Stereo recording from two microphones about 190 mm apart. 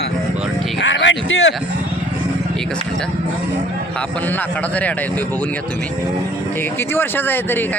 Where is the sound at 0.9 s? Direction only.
75° left (ahead or behind).